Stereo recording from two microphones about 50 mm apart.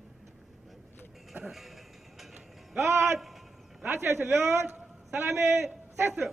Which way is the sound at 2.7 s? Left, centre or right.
Right.